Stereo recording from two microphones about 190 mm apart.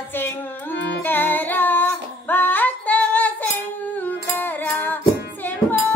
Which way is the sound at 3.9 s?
10° left (ahead or behind).